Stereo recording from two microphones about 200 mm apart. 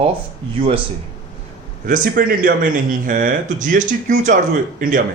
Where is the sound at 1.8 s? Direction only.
40° right (ahead or behind).